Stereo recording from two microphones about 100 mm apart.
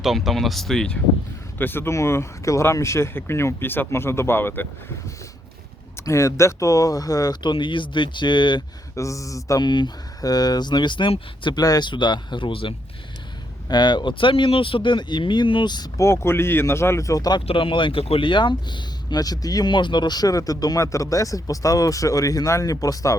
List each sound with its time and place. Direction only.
0.0 s speech: centre (ahead or behind)
1.5 s speech: 20° left (ahead or behind)
6.1 s speech: 30° left (ahead or behind)
7.5 s speech: 55° left (ahead or behind)
9.0 s speech: 30° left (ahead or behind); by 11.1 s 50° left (ahead or behind)
11.4 s speech: 40° left (ahead or behind)
16.0 s speech: 25° left (ahead or behind)
17.4 s speech: 60° left (ahead or behind); by 23.1 s 35° left (ahead or behind)